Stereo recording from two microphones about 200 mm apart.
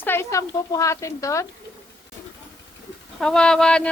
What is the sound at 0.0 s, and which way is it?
Speech, 10° left (ahead or behind).